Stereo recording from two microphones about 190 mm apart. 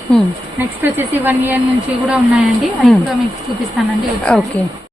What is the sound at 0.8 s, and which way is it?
Speech, 10° right (ahead or behind).